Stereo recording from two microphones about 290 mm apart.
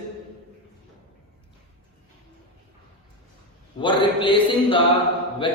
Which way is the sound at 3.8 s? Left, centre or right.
Centre.